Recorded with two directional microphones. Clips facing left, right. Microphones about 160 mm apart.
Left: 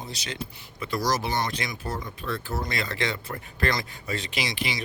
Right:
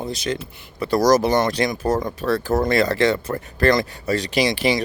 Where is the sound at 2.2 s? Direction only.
85° right.